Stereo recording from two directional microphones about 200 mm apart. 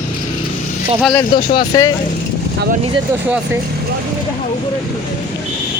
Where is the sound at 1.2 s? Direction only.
25° left (ahead or behind).